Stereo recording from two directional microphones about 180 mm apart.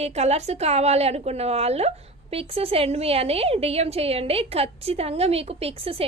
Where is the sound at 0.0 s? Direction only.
35° right (ahead or behind).